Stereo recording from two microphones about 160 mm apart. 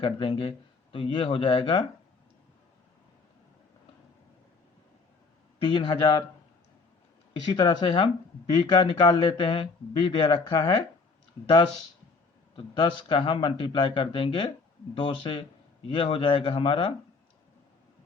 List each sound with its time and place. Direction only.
0.0 s speech: 35° left (ahead or behind)
5.5 s speech: 30° left (ahead or behind)
7.5 s speech: 30° left (ahead or behind)
12.5 s speech: 30° left (ahead or behind)